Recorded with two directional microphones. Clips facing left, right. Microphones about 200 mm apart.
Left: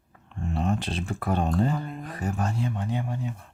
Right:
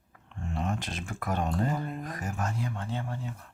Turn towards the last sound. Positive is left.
turn(degrees=15)  # may be behind; listen again after turning